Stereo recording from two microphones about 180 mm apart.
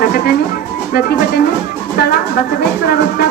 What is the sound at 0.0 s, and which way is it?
Music, 55° left (ahead or behind).